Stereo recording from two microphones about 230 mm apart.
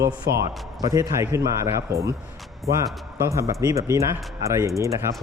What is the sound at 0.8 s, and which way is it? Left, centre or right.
Speech, centre.